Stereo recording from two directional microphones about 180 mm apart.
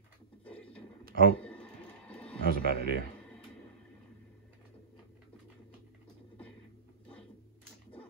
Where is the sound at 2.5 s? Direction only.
55° right (ahead or behind).